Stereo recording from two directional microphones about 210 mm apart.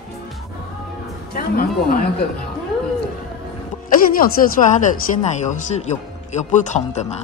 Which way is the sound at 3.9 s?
40° left (ahead or behind).